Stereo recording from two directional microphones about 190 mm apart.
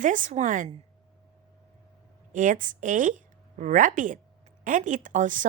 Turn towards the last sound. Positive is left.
turn(degrees=-45)  # may be behind; listen again after turning